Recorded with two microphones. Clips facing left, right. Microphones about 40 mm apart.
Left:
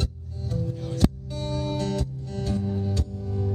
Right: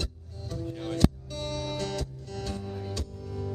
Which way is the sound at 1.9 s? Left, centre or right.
Left.